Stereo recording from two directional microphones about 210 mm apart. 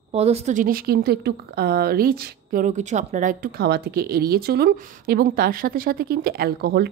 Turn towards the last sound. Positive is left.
turn(degrees=-45)  # may be behind; listen again after turning